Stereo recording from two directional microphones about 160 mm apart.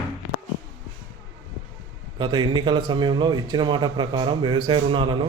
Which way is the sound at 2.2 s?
30° right (ahead or behind).